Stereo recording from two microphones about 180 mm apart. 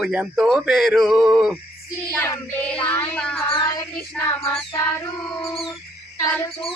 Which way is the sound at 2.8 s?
5° left (ahead or behind).